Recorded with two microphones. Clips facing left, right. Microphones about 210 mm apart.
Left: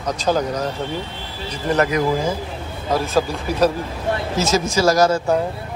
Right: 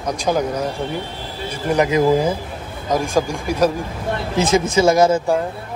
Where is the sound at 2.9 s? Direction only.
15° right (ahead or behind).